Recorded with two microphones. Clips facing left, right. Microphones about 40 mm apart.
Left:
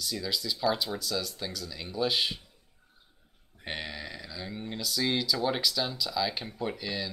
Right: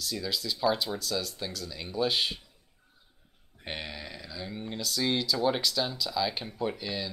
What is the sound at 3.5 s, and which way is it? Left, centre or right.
Speech, centre.